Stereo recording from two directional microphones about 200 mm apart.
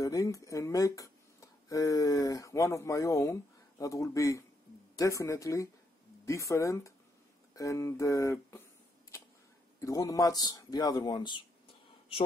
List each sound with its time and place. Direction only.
0.0 s speech: 15° left (ahead or behind)
9.8 s a man's voice: 15° left (ahead or behind)